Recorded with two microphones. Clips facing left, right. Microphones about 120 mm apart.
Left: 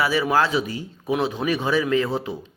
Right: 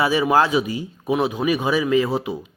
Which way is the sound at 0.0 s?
20° right (ahead or behind).